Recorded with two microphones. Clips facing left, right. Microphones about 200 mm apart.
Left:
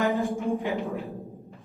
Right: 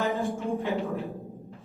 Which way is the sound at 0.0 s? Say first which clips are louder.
Left 3 dB; 15° left (ahead or behind).